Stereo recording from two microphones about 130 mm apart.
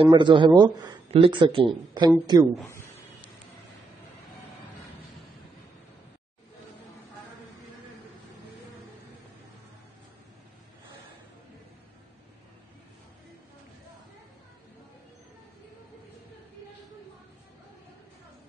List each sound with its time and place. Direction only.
0.1 s speech: 35° right (ahead or behind)